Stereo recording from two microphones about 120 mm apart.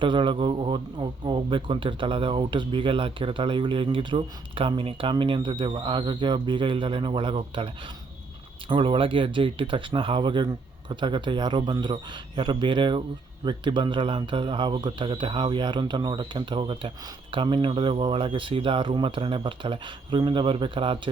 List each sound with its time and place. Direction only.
0.0 s a man's voice: 45° right (ahead or behind)